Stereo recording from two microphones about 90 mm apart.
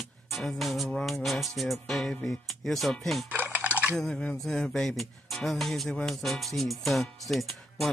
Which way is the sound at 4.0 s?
5° left (ahead or behind).